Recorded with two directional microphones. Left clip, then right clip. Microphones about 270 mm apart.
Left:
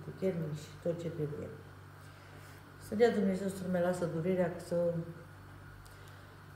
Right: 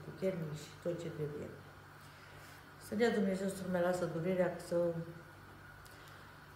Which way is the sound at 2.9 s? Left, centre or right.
Centre.